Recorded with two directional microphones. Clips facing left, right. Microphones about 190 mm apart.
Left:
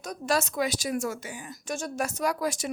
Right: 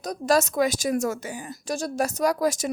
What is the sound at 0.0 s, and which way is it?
A woman's voice, 40° right (ahead or behind).